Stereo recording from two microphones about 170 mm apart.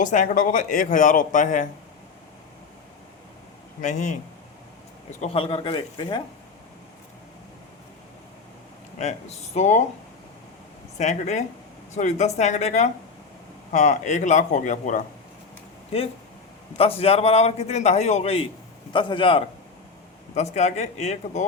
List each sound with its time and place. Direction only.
0.0 s speech: 50° left (ahead or behind)
3.8 s speech: 45° left (ahead or behind)
5.2 s a man's voice: 30° left (ahead or behind)
9.0 s a man's voice: 40° left (ahead or behind)
10.9 s speech: 40° left (ahead or behind)
15.9 s a man's voice: 35° left (ahead or behind)
20.3 s a man's voice: 40° left (ahead or behind)